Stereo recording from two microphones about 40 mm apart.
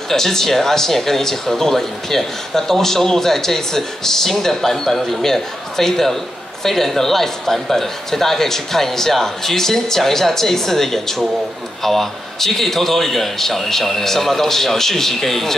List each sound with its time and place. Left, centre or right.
0.1 s speech: centre